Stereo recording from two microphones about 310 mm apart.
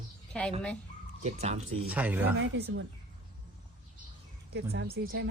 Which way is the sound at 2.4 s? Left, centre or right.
Right.